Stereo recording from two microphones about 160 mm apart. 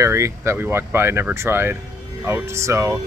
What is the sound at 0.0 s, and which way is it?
Speech, 15° right (ahead or behind).